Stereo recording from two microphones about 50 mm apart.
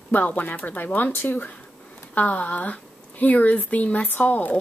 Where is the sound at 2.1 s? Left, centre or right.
Left.